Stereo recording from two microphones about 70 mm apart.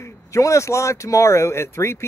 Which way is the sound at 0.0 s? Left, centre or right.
Left.